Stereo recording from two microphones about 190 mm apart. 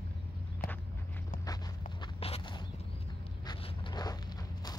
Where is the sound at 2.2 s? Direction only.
30° left (ahead or behind).